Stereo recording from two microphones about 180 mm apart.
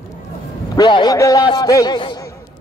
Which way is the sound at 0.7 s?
25° left (ahead or behind).